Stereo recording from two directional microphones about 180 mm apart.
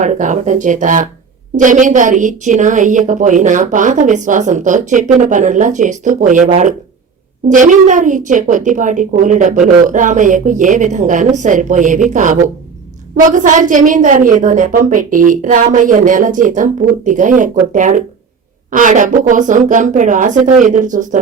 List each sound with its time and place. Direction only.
0.0 s a woman's voice: 40° right (ahead or behind)